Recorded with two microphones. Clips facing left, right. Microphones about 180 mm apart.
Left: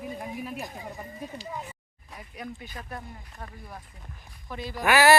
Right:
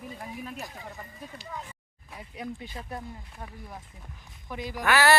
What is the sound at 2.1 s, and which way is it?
Speech, 25° right (ahead or behind).